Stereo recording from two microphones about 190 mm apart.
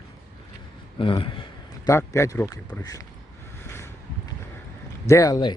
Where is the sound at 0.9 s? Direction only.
25° left (ahead or behind).